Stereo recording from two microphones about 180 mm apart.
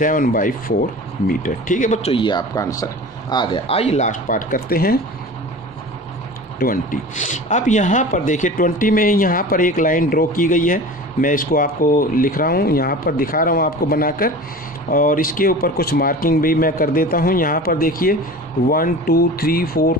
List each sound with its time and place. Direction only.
0.0 s speech: 50° left (ahead or behind)
6.6 s speech: 50° left (ahead or behind)